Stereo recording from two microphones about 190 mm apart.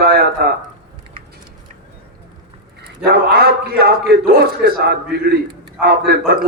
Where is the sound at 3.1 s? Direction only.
55° right (ahead or behind).